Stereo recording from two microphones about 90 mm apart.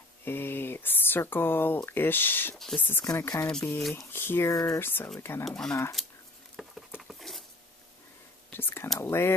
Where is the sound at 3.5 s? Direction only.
5° left (ahead or behind).